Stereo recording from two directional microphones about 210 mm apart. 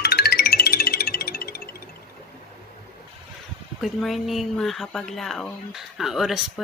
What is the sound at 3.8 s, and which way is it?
Speech, centre (ahead or behind).